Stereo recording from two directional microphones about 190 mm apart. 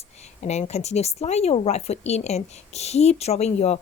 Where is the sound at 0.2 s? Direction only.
35° left (ahead or behind).